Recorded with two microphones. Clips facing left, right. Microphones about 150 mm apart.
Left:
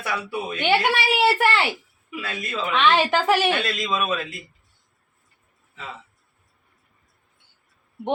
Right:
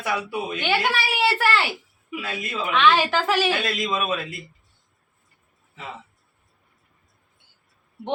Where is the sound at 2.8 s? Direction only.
15° left (ahead or behind).